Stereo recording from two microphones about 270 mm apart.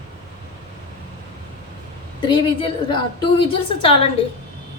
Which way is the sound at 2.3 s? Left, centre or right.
Centre.